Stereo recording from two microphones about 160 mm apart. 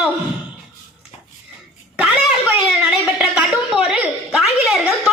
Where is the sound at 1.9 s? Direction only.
10° right (ahead or behind).